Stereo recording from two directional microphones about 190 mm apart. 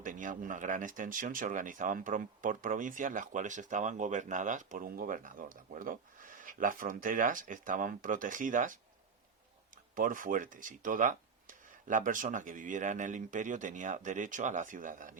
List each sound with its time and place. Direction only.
0.0 s speech: 45° right (ahead or behind)
9.9 s speech: 45° right (ahead or behind)